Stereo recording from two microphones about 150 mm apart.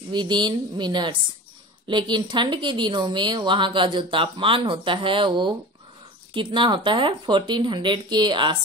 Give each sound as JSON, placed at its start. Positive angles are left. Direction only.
{"t": 0.1, "sound": "a woman's voice", "side_deg": -30}